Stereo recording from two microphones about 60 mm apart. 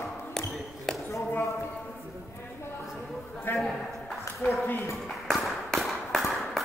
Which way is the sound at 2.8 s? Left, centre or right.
Centre.